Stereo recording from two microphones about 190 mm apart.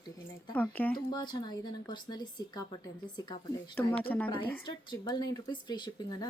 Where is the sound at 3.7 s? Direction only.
10° left (ahead or behind).